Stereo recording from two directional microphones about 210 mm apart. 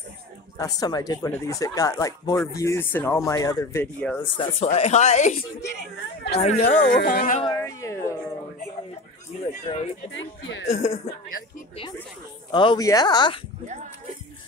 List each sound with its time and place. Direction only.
0.6 s speech: 15° left (ahead or behind)
4.2 s speech: 30° left (ahead or behind)
5.6 s a woman's voice: 50° left (ahead or behind)
6.3 s speech: 30° left (ahead or behind)
7.0 s speech: 45° left (ahead or behind)
7.4 s music: 15° left (ahead or behind)
10.1 s speech: 65° left (ahead or behind)
12.4 s speech: 20° left (ahead or behind)